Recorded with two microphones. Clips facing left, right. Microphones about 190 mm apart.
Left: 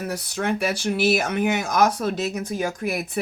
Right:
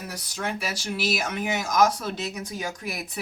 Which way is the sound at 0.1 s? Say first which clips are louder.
Left 5 dB; 60° left (ahead or behind).